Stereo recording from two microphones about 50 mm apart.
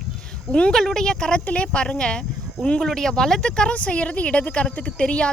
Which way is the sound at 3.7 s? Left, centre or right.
Left.